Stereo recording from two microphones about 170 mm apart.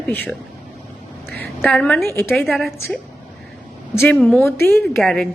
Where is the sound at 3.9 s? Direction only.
15° left (ahead or behind).